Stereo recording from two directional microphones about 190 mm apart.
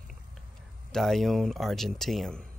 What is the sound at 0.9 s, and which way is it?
Speech, centre (ahead or behind).